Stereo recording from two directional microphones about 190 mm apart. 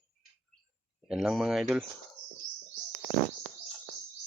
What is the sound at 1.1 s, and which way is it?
Speech, 5° right (ahead or behind).